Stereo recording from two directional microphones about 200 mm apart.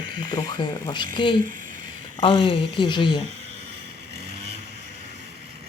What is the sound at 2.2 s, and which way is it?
Speech, 25° left (ahead or behind).